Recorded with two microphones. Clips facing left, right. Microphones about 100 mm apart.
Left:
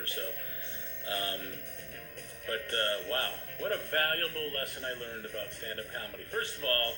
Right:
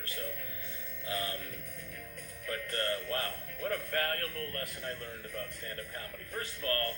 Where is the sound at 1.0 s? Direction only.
60° left (ahead or behind).